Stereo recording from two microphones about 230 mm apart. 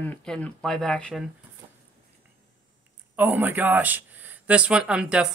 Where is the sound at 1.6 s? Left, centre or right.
Centre.